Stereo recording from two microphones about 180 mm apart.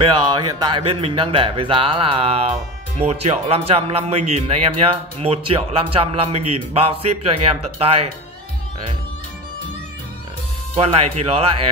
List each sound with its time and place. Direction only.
0.4 s speech: 25° right (ahead or behind)
10.7 s speech: 35° right (ahead or behind)